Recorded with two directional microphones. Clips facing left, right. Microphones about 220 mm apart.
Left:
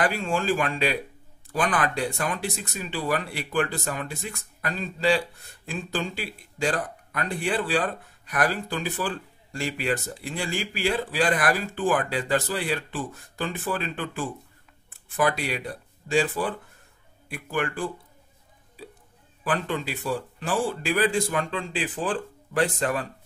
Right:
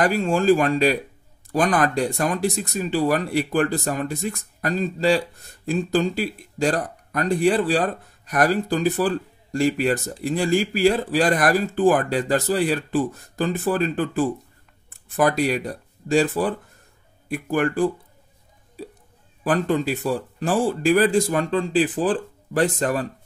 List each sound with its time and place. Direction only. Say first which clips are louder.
0.0 s speech: right 6 dB; 40° right (ahead or behind)
19.4 s speech: right 7 dB; 40° right (ahead or behind)